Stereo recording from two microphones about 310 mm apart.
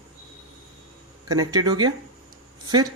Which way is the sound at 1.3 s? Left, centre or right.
Centre.